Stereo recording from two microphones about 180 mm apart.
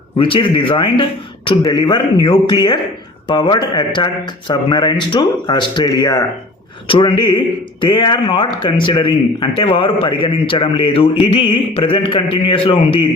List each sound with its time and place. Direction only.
0.2 s speech: 30° left (ahead or behind)